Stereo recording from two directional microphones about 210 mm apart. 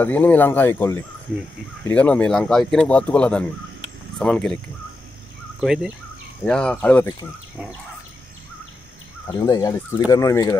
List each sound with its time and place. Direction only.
0.0 s speech: 10° left (ahead or behind)
5.6 s speech: centre (ahead or behind)
9.3 s speech: 15° left (ahead or behind)